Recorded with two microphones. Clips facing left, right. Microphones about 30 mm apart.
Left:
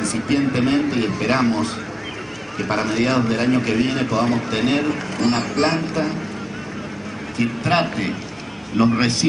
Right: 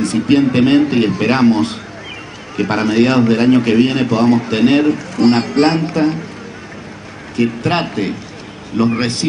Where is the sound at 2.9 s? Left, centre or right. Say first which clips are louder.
Right 8 dB; right.